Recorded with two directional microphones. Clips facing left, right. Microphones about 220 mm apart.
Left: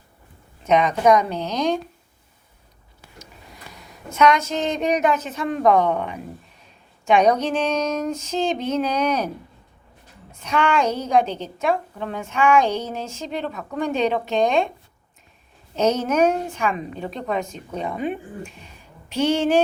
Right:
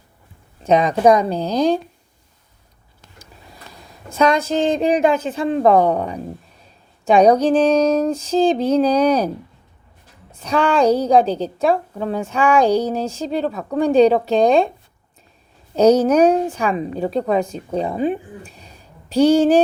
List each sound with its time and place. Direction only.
0.6 s a woman's voice: 35° right (ahead or behind)
4.1 s a woman's voice: 35° right (ahead or behind)
10.3 s a woman's voice: 35° right (ahead or behind)
15.7 s a woman's voice: 35° right (ahead or behind)